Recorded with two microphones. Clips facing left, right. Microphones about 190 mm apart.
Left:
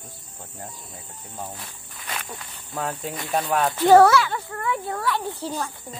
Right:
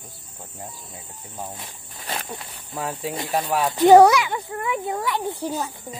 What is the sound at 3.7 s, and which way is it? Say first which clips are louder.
Speech: right 3 dB; 20° right (ahead or behind).